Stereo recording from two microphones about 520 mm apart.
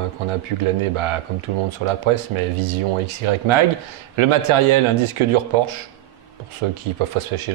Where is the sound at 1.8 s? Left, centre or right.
Right.